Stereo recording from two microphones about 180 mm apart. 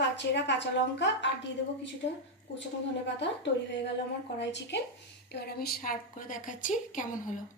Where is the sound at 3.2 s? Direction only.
75° left (ahead or behind).